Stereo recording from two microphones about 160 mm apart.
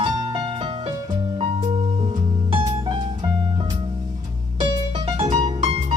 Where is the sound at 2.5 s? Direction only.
35° right (ahead or behind).